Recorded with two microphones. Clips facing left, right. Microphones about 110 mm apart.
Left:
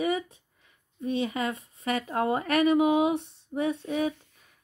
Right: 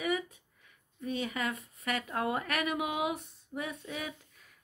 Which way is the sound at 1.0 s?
25° left (ahead or behind).